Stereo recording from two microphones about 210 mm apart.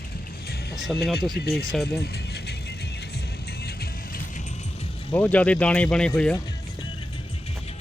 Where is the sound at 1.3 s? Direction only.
50° left (ahead or behind).